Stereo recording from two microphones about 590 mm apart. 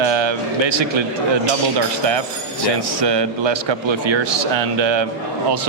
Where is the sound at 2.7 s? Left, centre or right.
Right.